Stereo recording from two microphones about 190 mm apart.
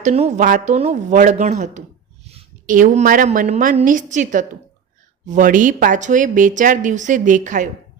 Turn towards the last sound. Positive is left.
turn(degrees=-40)  # may be behind; listen again after turning